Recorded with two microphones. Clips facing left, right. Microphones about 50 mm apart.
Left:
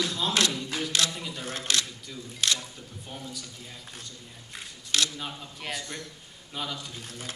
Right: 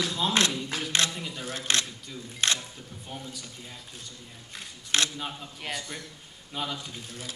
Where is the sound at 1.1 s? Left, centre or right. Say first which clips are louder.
Even; centre.